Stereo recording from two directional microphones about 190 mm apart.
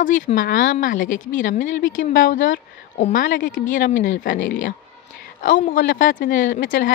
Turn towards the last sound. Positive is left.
turn(degrees=45)  # may be behind; listen again after turning